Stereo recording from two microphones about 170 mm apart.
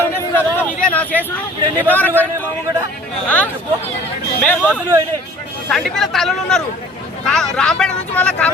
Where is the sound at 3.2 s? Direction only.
10° left (ahead or behind).